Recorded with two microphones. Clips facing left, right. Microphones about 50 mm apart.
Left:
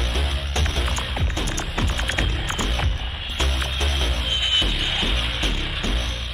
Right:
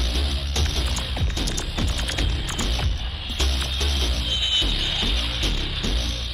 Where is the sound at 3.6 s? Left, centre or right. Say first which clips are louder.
Left 2 dB; left.